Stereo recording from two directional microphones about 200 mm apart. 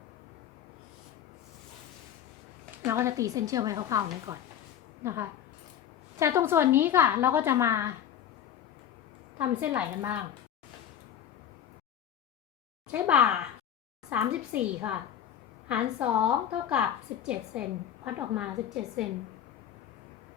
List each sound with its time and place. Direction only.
2.8 s a woman's voice: 15° right (ahead or behind)
9.4 s a woman's voice: 10° right (ahead or behind)
12.9 s a woman's voice: 5° right (ahead or behind)